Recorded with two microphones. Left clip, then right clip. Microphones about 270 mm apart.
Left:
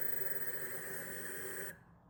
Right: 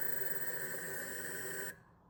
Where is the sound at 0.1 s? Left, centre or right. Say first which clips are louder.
Right 2 dB; right.